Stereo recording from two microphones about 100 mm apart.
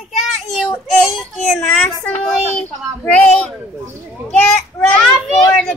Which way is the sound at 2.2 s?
10° left (ahead or behind).